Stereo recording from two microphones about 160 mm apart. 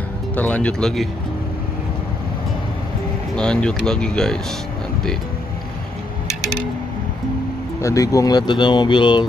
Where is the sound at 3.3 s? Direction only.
5° left (ahead or behind).